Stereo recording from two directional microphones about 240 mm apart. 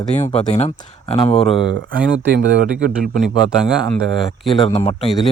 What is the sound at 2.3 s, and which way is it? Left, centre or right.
Speech, right.